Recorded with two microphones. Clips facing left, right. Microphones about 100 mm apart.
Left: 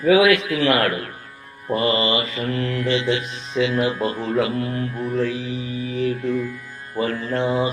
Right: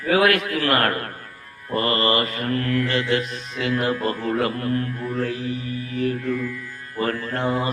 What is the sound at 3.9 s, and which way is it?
Mantra, 20° left (ahead or behind).